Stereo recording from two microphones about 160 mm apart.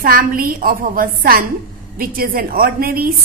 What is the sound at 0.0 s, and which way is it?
A woman's voice, 60° right (ahead or behind).